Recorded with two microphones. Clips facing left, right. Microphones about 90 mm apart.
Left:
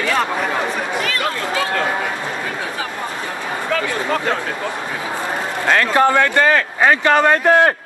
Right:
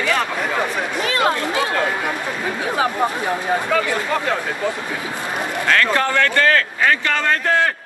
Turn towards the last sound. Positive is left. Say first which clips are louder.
# left 6 dB
turn(degrees=20)  # may be behind; listen again after turning